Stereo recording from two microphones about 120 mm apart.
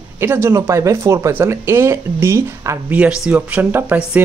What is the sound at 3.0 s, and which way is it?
Speech, 10° right (ahead or behind).